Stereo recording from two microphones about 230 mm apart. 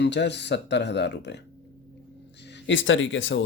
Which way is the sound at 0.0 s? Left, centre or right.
Left.